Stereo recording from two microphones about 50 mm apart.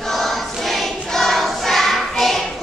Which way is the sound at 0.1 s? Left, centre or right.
Centre.